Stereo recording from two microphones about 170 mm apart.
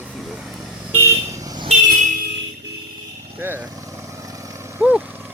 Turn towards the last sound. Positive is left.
turn(degrees=-10)  # may be behind; listen again after turning